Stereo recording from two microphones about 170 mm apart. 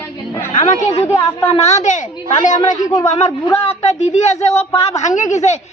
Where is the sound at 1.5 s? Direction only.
40° left (ahead or behind).